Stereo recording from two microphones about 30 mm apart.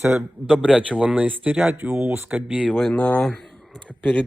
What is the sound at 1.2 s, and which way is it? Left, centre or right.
Speech, right.